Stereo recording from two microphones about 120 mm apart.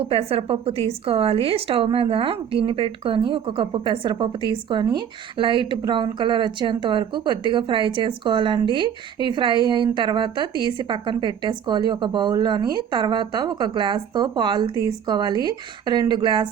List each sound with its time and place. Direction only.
0.0 s a woman's voice: 55° right (ahead or behind)